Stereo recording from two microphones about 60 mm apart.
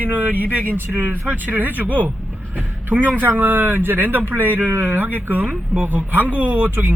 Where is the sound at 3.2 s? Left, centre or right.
Right.